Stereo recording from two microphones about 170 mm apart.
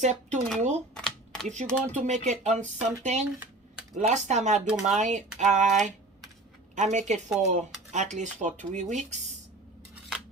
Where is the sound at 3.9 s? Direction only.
45° right (ahead or behind).